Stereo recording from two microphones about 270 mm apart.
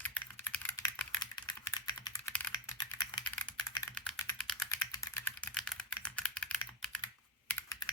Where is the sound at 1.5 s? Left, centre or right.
Centre.